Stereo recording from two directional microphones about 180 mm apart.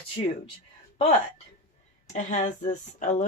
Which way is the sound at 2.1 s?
45° left (ahead or behind).